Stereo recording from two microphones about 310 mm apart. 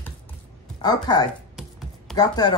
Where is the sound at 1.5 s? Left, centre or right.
Centre.